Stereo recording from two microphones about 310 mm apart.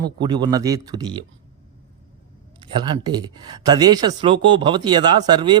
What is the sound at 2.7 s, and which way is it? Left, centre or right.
Speech, centre.